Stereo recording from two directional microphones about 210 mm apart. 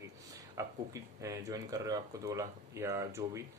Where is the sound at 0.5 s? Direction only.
15° right (ahead or behind).